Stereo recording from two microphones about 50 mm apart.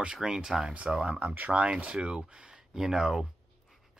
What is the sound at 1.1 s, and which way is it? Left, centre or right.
Speech, right.